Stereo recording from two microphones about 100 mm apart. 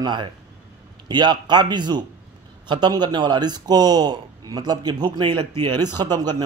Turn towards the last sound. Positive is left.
turn(degrees=-45)  # may be behind; listen again after turning